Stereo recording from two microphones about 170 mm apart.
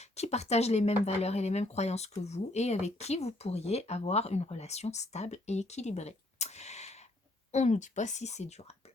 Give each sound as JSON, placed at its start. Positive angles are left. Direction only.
{"t": 0.0, "sound": "speech", "side_deg": 40}